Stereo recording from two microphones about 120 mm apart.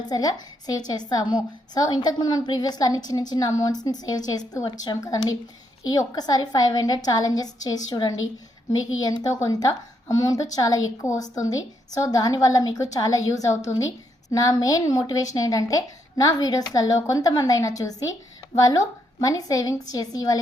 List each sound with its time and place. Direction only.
0.1 s a woman's voice: 30° left (ahead or behind)